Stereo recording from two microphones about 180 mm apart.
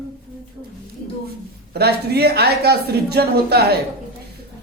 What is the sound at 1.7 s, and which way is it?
A woman's voice, 60° right (ahead or behind).